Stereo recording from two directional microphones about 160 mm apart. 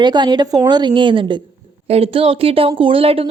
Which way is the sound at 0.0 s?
30° right (ahead or behind).